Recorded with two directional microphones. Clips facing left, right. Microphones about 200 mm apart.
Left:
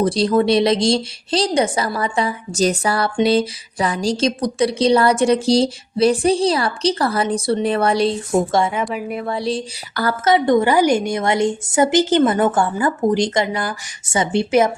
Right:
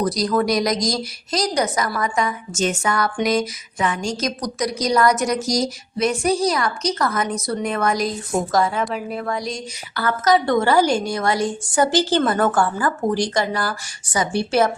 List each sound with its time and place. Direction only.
0.0 s a woman's voice: 30° left (ahead or behind)
8.7 s a woman's voice: 5° left (ahead or behind)
9.2 s a sound: 30° left (ahead or behind)
10.3 s a woman's voice: 15° left (ahead or behind)